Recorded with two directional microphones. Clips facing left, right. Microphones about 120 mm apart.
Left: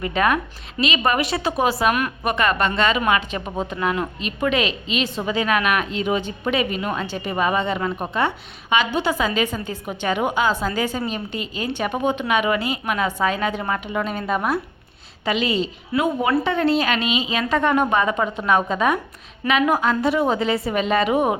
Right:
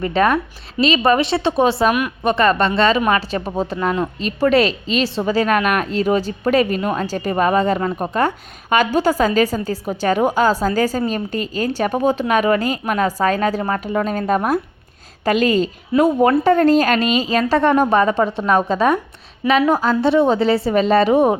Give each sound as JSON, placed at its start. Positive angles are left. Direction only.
{"t": 0.0, "sound": "a woman's voice", "side_deg": -30}